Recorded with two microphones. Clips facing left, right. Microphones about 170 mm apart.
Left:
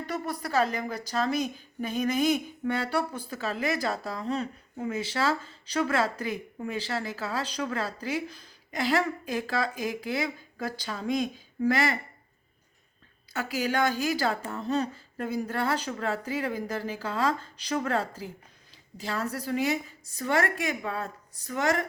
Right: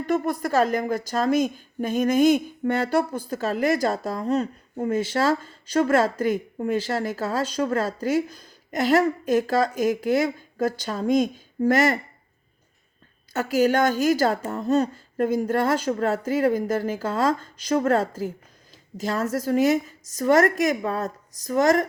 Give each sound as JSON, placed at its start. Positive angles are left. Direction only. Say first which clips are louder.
{"t": 0.1, "sound": "a woman's voice", "louder": "right 8 dB", "side_deg": -50}
{"t": 13.3, "sound": "a woman's voice", "louder": "right 8 dB", "side_deg": -45}